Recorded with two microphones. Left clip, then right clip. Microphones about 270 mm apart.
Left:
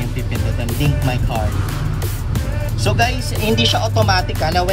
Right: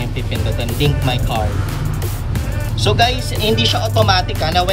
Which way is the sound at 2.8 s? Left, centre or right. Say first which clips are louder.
Right 3 dB; centre.